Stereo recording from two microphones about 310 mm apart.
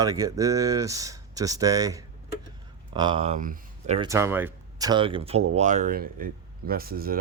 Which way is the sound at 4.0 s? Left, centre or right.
Centre.